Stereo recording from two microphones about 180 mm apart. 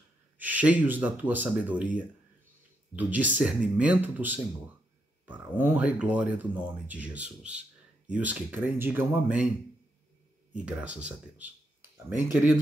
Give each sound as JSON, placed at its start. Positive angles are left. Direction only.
{"t": 0.4, "sound": "speech", "side_deg": -10}
{"t": 10.5, "sound": "speech", "side_deg": -10}